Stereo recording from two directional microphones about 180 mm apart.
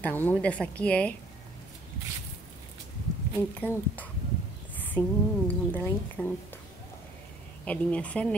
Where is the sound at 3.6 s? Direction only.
10° left (ahead or behind).